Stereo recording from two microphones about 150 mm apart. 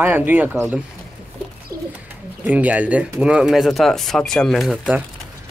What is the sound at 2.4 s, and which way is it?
Speech, 10° right (ahead or behind).